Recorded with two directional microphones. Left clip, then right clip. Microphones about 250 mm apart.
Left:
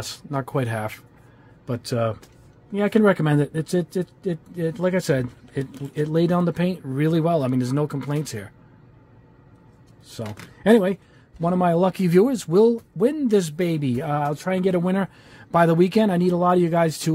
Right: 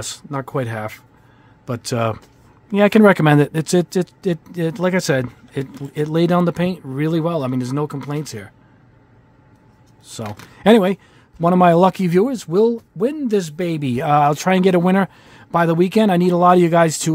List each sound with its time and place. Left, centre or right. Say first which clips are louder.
0.0 s speech: right 2 dB; centre
1.7 s speech: right 3 dB; right
10.1 s speech: right 4 dB; right
14.0 s speech: right 13 dB; right